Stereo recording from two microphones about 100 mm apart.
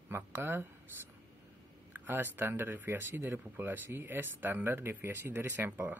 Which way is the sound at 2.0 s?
20° right (ahead or behind).